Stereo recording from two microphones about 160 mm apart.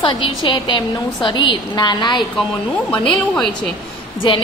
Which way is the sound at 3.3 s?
5° left (ahead or behind).